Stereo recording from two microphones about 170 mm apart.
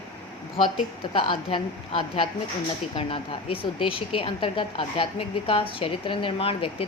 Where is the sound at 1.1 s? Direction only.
30° left (ahead or behind).